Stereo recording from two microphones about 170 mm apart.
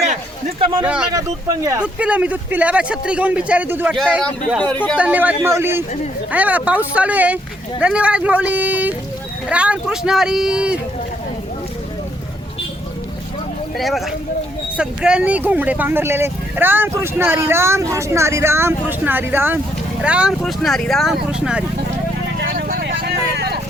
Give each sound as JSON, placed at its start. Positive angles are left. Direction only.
{"t": 0.6, "sound": "speech", "side_deg": -30}
{"t": 0.9, "sound": "speech", "side_deg": -5}
{"t": 4.6, "sound": "speech", "side_deg": 10}
{"t": 4.9, "sound": "speech", "side_deg": -10}
{"t": 13.7, "sound": "speech", "side_deg": 0}
{"t": 22.4, "sound": "vehicle", "side_deg": -60}